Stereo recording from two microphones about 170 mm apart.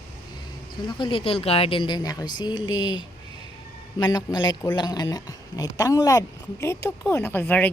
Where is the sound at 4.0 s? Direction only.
25° left (ahead or behind).